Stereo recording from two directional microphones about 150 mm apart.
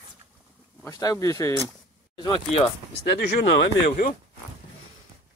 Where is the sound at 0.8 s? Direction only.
20° left (ahead or behind).